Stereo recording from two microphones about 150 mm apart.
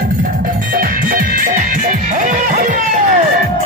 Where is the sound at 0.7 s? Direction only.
65° right (ahead or behind).